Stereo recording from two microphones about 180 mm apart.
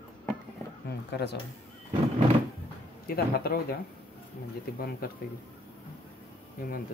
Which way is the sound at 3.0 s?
60° left (ahead or behind).